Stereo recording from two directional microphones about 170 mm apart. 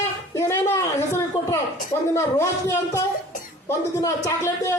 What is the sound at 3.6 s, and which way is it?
Speech, 20° left (ahead or behind).